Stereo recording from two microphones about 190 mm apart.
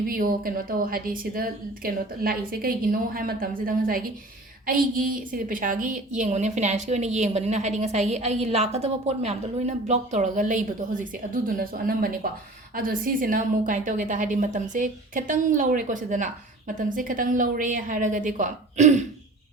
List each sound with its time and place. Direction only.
0.1 s a woman's voice: 50° right (ahead or behind)